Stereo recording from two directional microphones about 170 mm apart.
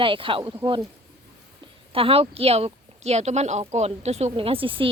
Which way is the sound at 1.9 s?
35° right (ahead or behind).